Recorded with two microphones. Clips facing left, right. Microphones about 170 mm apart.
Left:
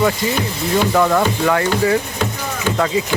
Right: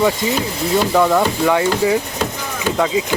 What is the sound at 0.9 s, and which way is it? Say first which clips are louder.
Speech: right 2 dB; 5° right (ahead or behind).